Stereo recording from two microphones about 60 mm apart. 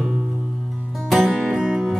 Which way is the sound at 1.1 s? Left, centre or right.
Centre.